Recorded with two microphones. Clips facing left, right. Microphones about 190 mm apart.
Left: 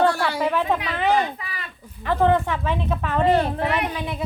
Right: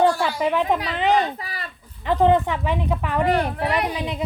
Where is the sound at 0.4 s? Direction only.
15° right (ahead or behind).